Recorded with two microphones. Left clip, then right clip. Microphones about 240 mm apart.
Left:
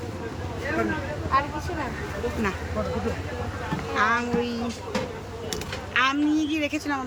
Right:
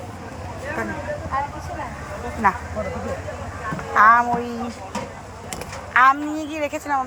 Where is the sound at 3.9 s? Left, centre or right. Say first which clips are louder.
Right 10 dB; centre.